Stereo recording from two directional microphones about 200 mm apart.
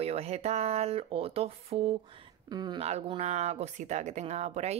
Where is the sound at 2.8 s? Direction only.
30° right (ahead or behind).